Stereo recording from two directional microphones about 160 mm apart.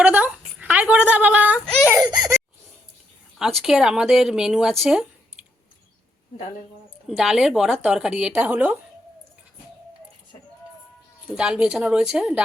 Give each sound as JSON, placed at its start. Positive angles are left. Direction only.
{"t": 0.0, "sound": "a sound", "side_deg": -10}
{"t": 2.0, "sound": "laughter", "side_deg": -25}
{"t": 3.3, "sound": "speech", "side_deg": 0}
{"t": 4.8, "sound": "a sound", "side_deg": -5}
{"t": 7.2, "sound": "speech", "side_deg": 0}
{"t": 11.3, "sound": "speech", "side_deg": -5}